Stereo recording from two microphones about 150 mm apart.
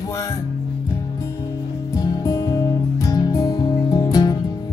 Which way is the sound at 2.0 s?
25° left (ahead or behind).